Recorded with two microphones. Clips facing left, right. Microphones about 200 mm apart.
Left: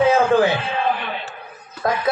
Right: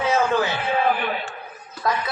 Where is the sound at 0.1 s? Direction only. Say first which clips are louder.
Left 5 dB; 55° left (ahead or behind).